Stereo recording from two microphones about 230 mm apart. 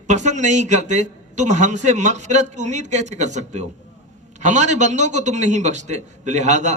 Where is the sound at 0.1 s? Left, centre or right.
Right.